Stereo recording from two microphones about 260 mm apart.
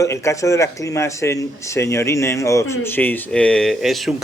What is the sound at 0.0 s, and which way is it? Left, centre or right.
Speech, centre.